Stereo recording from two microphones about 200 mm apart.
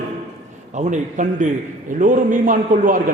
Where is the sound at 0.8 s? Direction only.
35° right (ahead or behind).